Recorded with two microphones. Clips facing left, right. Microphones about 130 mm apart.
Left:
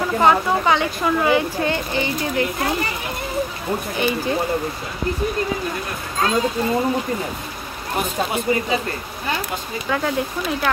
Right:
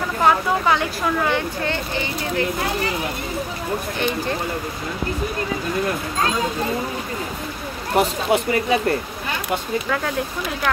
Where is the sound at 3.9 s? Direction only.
5° left (ahead or behind).